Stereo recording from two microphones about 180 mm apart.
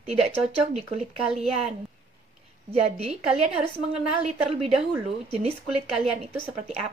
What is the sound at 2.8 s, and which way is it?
A woman's voice, 40° right (ahead or behind).